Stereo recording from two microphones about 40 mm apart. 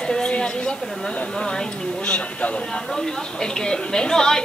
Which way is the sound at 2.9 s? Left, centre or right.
Centre.